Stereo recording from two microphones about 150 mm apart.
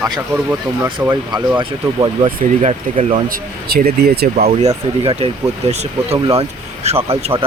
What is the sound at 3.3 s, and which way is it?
Speech, 80° right.